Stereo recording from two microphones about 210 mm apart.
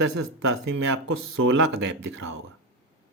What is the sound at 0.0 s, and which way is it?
Speech, 65° right (ahead or behind).